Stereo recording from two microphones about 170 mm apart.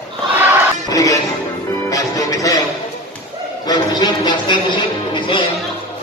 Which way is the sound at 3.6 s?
25° left (ahead or behind).